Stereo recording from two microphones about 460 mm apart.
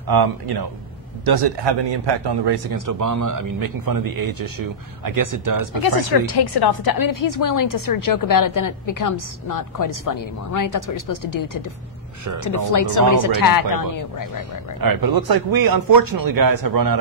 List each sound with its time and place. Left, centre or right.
0.1 s a man's voice: right
5.8 s a woman's voice: left
14.8 s a man's voice: right